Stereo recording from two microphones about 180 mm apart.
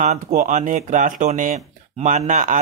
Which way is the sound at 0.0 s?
45° right (ahead or behind).